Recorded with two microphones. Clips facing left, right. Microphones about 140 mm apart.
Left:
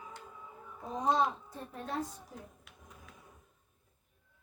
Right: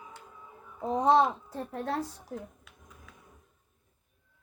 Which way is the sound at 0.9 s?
75° right (ahead or behind).